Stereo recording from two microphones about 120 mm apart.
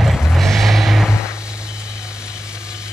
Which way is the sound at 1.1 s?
25° left (ahead or behind).